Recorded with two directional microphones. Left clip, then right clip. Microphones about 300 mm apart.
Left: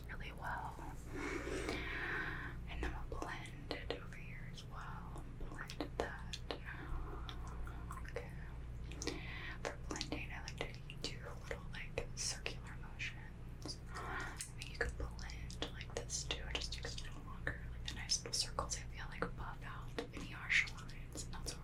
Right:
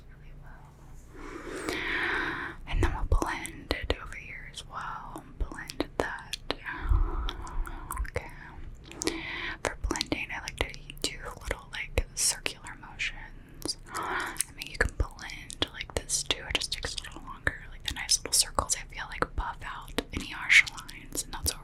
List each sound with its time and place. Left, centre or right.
1.6 s whispering: right
7.3 s chewing: right
8.1 s whispering: right